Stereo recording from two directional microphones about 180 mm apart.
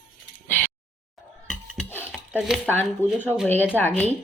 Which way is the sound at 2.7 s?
10° left (ahead or behind).